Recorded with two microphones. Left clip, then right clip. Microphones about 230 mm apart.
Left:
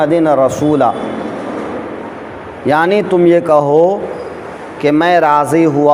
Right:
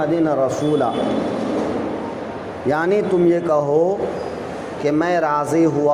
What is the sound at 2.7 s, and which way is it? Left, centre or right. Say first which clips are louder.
Speech: left 7 dB; left.